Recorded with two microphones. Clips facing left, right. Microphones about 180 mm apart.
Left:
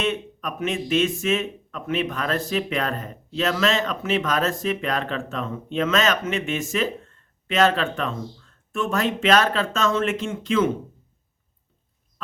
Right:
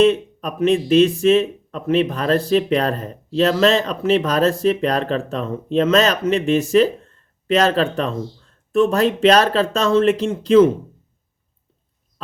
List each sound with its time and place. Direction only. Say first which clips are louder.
0.0 s speech: right 11 dB; 35° right (ahead or behind)